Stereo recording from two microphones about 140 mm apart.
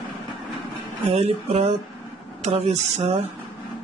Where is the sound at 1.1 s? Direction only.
50° right (ahead or behind).